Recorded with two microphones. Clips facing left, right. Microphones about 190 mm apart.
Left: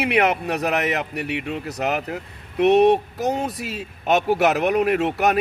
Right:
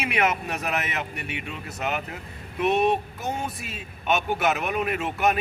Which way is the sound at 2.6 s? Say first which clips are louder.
Left 7 dB; 75° left (ahead or behind).